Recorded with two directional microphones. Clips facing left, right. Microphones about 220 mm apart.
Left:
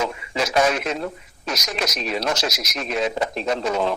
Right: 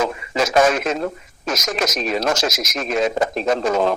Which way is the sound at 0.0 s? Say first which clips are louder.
Right 4 dB; 45° right (ahead or behind).